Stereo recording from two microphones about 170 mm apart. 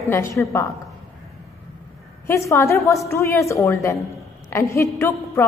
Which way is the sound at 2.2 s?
15° left (ahead or behind).